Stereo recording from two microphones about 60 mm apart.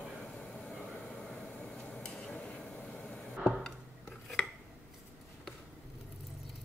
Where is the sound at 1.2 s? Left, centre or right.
Centre.